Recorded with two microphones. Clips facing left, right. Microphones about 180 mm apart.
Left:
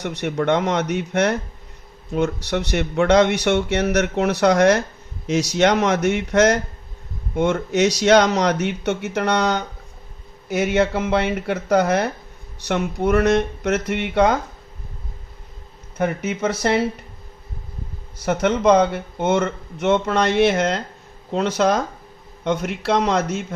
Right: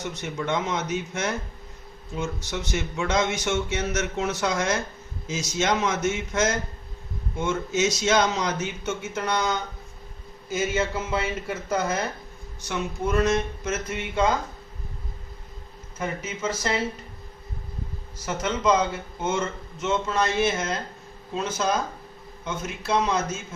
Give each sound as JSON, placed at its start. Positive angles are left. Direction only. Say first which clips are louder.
{"t": 0.0, "sound": "speech", "louder": "left 8 dB", "side_deg": 65}
{"t": 16.0, "sound": "speech", "louder": "left 8 dB", "side_deg": 65}
{"t": 18.2, "sound": "speech", "louder": "left 8 dB", "side_deg": 65}